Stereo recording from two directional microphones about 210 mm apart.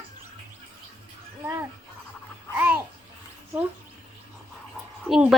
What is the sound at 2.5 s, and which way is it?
Babbling, 10° right (ahead or behind).